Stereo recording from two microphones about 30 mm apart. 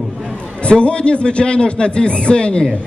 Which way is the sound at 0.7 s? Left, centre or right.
Left.